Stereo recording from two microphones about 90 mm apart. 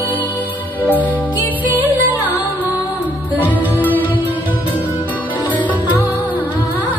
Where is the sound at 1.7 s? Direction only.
20° right (ahead or behind).